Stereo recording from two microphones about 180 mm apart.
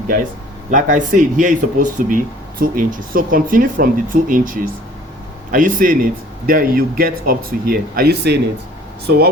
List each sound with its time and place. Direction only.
0.7 s speech: 45° right (ahead or behind); by 9.3 s 60° right (ahead or behind)